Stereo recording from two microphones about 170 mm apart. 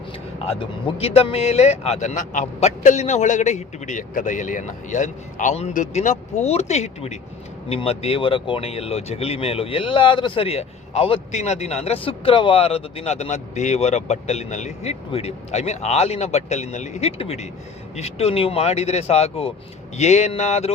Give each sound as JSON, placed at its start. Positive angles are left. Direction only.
{"t": 0.5, "sound": "speech", "side_deg": 30}